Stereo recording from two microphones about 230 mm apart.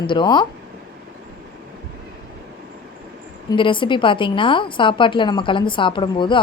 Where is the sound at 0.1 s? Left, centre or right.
Centre.